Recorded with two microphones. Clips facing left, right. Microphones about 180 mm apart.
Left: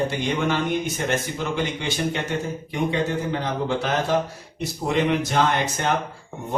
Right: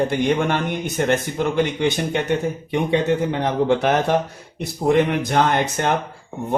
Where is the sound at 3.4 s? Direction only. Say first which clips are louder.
Right 6 dB; 60° right (ahead or behind).